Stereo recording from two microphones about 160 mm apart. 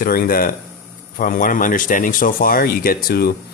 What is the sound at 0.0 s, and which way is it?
Speech, 65° left (ahead or behind).